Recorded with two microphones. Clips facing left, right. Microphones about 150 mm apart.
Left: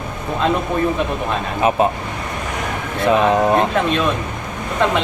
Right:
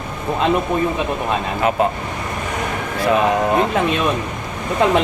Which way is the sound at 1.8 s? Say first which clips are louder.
Left 1 dB; 20° left (ahead or behind).